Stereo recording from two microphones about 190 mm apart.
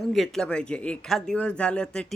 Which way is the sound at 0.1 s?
Centre (ahead or behind).